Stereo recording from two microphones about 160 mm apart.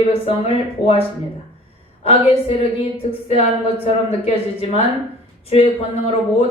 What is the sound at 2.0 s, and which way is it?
A woman's voice, 35° left (ahead or behind).